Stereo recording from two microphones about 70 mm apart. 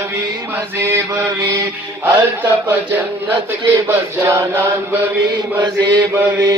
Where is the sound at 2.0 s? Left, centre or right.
Right.